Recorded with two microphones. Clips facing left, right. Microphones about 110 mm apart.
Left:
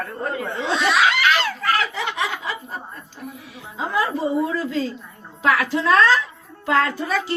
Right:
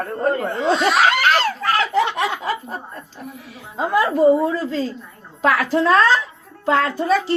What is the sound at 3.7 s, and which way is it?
Speech, 60° right (ahead or behind).